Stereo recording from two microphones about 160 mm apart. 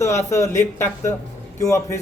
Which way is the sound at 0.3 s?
20° left (ahead or behind).